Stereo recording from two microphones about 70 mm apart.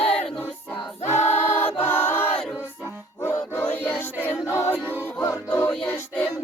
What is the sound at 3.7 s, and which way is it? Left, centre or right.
Music, left.